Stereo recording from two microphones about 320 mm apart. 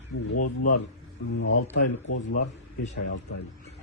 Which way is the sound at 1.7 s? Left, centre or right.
Left.